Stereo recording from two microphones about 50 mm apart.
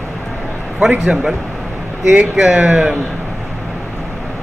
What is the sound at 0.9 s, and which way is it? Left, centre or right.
Speech, right.